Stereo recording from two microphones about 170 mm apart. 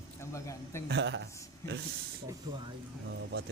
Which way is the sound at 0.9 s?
90° right.